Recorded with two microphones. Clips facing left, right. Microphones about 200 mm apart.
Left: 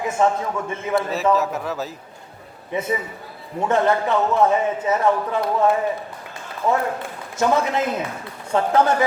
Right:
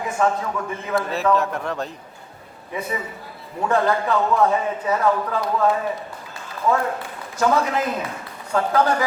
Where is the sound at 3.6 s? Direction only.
20° left (ahead or behind).